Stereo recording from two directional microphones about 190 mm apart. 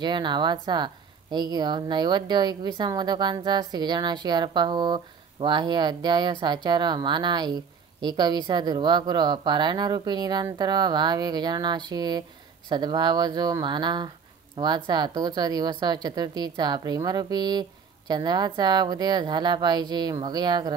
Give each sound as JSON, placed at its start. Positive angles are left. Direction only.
{"t": 0.0, "sound": "a woman's voice", "side_deg": -25}